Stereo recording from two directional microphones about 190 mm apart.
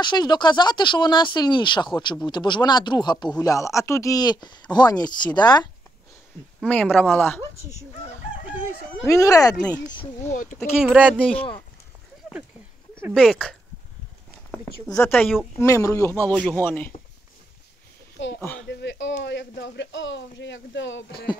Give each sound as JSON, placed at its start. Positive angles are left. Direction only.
{"t": 0.0, "sound": "speech", "side_deg": 25}
{"t": 6.6, "sound": "speech", "side_deg": 5}
{"t": 9.0, "sound": "speech", "side_deg": 15}
{"t": 10.3, "sound": "speech", "side_deg": 45}
{"t": 10.8, "sound": "speech", "side_deg": -5}
{"t": 11.1, "sound": "speech", "side_deg": 5}
{"t": 13.1, "sound": "speech", "side_deg": 0}
{"t": 14.9, "sound": "speech", "side_deg": 15}
{"t": 18.4, "sound": "speech", "side_deg": 10}
{"t": 18.7, "sound": "speech", "side_deg": 65}